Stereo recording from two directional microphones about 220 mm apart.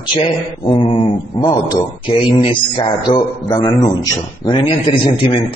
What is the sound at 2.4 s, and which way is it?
A man's voice, 20° left (ahead or behind).